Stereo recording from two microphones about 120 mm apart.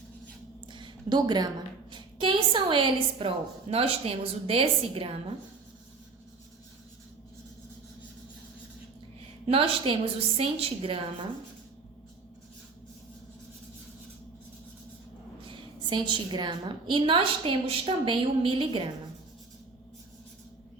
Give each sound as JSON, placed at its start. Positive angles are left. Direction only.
{"t": 0.7, "sound": "a sound", "side_deg": -40}
{"t": 1.9, "sound": "a woman's voice", "side_deg": -40}
{"t": 9.5, "sound": "a woman's voice", "side_deg": -50}
{"t": 15.4, "sound": "a woman's voice", "side_deg": -40}